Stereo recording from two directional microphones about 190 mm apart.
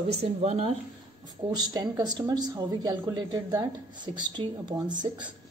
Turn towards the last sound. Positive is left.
turn(degrees=-25)  # may be behind; listen again after turning